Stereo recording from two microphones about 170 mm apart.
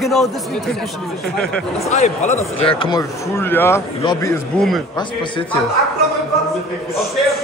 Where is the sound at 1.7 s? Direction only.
40° left (ahead or behind).